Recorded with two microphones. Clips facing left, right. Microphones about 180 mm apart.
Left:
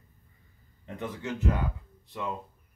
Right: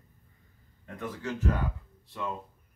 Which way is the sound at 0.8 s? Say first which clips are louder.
Left 1 dB; 20° left (ahead or behind).